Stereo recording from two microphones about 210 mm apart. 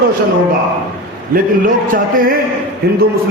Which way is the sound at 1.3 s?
40° right (ahead or behind).